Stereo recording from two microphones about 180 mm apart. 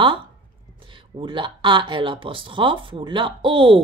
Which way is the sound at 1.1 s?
25° right (ahead or behind).